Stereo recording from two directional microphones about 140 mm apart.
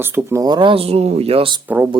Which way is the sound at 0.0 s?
20° right (ahead or behind).